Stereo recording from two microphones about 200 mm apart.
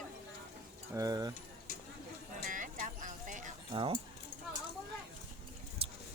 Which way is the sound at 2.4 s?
40° right (ahead or behind).